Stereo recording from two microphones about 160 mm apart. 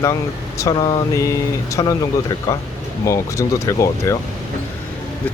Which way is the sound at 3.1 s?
20° left (ahead or behind).